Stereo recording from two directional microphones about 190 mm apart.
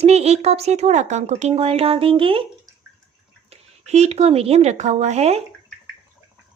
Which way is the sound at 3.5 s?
35° right (ahead or behind).